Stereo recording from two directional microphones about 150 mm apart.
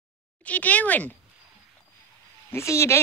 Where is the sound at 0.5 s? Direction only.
10° left (ahead or behind).